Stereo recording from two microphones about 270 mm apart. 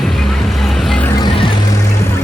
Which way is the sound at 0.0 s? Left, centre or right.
Centre.